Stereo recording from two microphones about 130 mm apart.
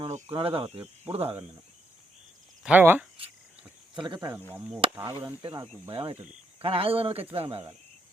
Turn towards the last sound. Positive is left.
turn(degrees=-50)  # may be behind; listen again after turning